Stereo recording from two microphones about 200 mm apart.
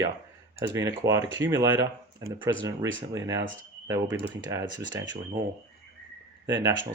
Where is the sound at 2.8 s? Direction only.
15° right (ahead or behind).